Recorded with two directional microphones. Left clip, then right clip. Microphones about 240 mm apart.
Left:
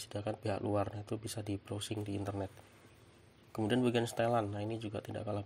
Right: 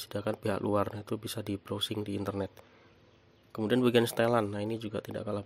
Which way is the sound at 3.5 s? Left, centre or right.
Right.